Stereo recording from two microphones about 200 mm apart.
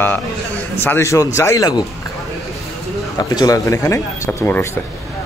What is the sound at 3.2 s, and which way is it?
A man's voice, 20° left (ahead or behind).